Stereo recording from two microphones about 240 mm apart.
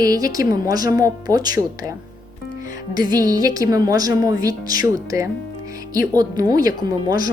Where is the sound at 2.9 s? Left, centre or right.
Centre.